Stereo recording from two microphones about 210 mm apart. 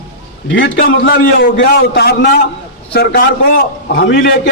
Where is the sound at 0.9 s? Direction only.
55° left (ahead or behind).